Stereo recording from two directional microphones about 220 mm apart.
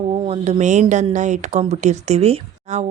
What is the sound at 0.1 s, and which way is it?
Speech, 25° right (ahead or behind).